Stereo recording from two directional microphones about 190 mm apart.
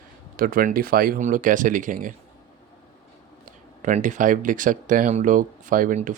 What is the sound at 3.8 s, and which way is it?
Speech, 40° right (ahead or behind).